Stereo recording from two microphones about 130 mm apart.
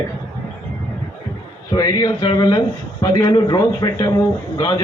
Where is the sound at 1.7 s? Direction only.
30° left (ahead or behind).